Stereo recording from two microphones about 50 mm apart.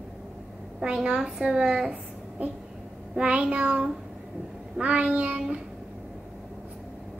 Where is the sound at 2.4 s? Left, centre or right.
Right.